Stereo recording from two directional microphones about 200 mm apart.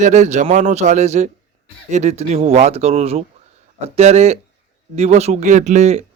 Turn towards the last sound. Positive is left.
turn(degrees=-35)  # may be behind; listen again after turning